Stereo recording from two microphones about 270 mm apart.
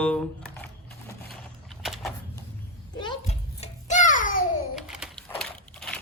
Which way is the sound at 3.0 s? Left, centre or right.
Centre.